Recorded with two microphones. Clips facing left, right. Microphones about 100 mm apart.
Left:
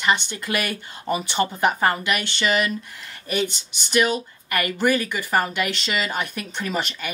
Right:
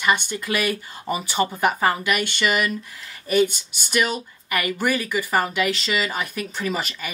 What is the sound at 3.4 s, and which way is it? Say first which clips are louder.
Speech: right 2 dB; 50° right (ahead or behind).